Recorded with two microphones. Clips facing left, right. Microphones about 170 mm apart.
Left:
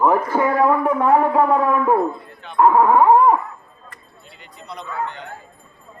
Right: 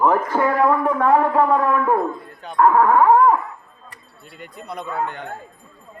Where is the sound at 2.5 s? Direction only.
15° left (ahead or behind).